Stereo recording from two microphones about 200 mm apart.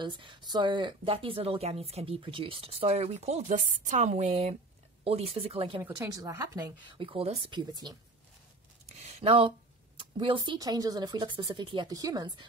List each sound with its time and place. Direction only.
0.0 s speech: 25° right (ahead or behind)
5.8 s a woman's voice: 15° right (ahead or behind)
7.1 s speech: 30° right (ahead or behind)
8.9 s a sound: 25° right (ahead or behind)
9.9 s speech: 25° right (ahead or behind)